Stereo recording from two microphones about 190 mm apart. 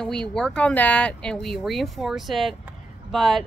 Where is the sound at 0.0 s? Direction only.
5° left (ahead or behind).